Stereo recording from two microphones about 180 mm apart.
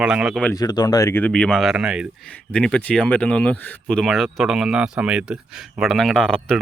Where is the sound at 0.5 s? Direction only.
20° left (ahead or behind); by 2.0 s 5° right (ahead or behind).